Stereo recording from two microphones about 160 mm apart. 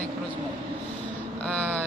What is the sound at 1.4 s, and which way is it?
Speech, 10° left (ahead or behind).